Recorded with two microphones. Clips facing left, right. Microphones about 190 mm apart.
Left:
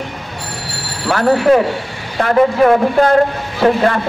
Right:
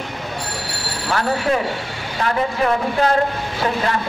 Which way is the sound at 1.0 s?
50° left (ahead or behind).